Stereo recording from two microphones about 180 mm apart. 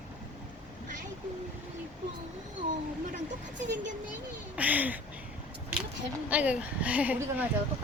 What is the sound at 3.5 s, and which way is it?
Speech, 80° right.